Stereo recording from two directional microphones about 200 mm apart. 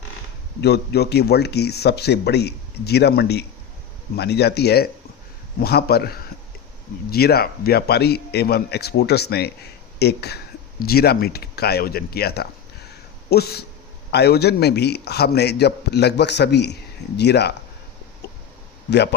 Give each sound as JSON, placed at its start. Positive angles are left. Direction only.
{"t": 0.6, "sound": "a man's voice", "side_deg": 55}
{"t": 18.9, "sound": "a man's voice", "side_deg": 55}